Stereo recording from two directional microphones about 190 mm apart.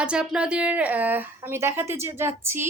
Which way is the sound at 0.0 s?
5° right (ahead or behind).